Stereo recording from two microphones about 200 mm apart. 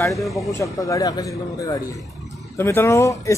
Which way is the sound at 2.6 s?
10° left (ahead or behind).